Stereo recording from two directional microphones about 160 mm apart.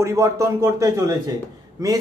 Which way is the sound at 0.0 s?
20° right (ahead or behind).